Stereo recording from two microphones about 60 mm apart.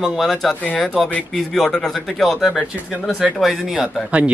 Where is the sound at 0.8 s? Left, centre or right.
Centre.